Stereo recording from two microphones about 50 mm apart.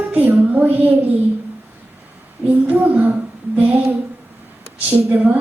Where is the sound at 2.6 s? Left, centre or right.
Right.